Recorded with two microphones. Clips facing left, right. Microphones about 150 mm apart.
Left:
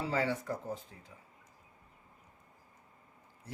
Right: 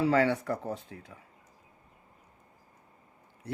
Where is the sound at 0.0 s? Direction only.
70° right (ahead or behind).